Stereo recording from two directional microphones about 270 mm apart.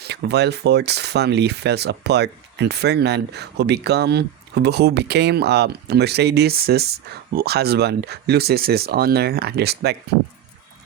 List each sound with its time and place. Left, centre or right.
0.0 s speech: right